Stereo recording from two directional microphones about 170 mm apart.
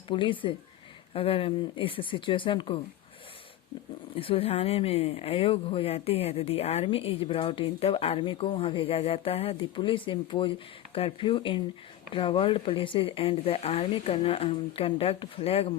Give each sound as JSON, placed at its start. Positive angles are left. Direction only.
{"t": 0.1, "sound": "speech", "side_deg": 30}
{"t": 4.1, "sound": "speech", "side_deg": 35}